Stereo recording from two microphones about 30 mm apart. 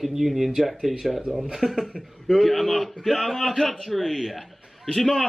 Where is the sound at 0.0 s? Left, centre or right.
Centre.